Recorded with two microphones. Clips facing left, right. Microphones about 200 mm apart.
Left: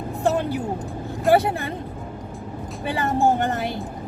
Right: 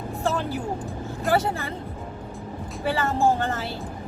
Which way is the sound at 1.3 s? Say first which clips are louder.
Left 5 dB; 15° left (ahead or behind).